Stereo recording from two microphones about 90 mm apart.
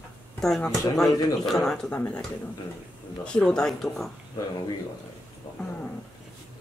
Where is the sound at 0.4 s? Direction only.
5° left (ahead or behind).